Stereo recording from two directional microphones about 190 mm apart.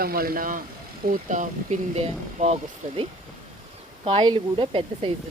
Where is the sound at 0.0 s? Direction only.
50° right (ahead or behind).